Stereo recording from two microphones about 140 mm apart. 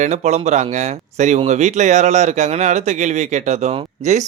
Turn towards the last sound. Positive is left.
turn(degrees=-55)  # may be behind; listen again after turning